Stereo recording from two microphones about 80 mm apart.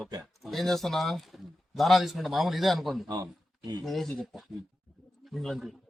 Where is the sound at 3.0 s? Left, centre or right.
Right.